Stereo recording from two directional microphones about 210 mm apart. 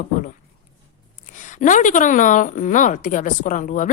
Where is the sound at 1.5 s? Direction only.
35° left (ahead or behind).